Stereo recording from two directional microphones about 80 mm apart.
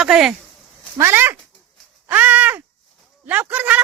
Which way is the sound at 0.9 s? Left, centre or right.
Right.